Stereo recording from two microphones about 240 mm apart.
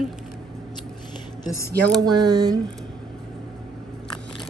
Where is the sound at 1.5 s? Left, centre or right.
Centre.